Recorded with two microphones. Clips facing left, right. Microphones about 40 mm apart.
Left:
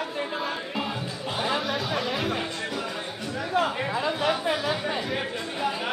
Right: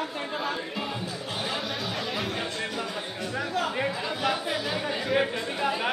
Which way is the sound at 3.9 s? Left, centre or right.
Centre.